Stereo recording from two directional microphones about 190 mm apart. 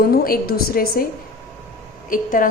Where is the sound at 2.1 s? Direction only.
45° left (ahead or behind).